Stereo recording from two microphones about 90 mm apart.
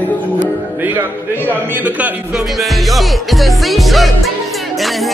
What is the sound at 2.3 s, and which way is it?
Music, centre (ahead or behind).